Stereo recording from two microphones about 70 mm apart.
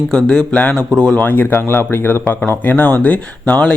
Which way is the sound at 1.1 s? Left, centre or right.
Left.